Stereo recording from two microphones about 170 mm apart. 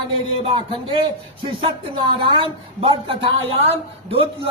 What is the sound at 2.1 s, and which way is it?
Speech, 30° right (ahead or behind).